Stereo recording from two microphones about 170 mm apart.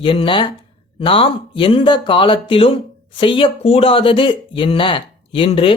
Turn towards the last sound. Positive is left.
turn(degrees=35)  # may be behind; listen again after turning